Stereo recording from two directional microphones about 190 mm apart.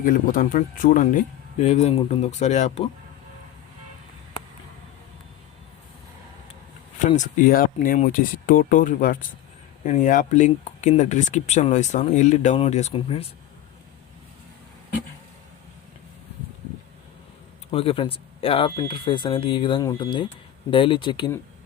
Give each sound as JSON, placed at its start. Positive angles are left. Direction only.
{"t": 0.0, "sound": "speech", "side_deg": 45}
{"t": 7.2, "sound": "speech", "side_deg": 45}
{"t": 17.7, "sound": "speech", "side_deg": 30}